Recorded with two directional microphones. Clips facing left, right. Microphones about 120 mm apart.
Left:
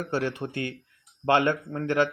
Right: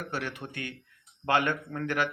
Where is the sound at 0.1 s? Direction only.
30° left (ahead or behind).